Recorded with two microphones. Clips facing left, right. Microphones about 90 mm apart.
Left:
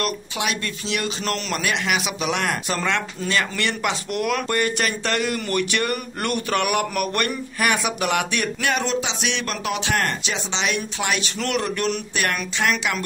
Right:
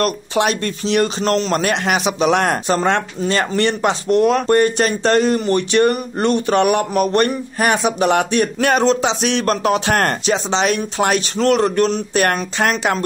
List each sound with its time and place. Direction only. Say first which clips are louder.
0.0 s speech: right 8 dB; 40° right (ahead or behind)